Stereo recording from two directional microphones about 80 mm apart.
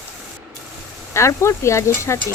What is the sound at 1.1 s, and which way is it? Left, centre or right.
Speech, left.